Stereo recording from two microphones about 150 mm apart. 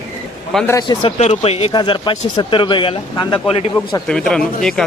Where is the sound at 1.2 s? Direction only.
45° left (ahead or behind).